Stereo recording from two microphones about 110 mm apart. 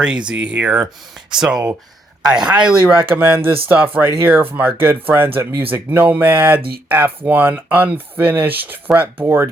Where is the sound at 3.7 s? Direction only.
15° right (ahead or behind).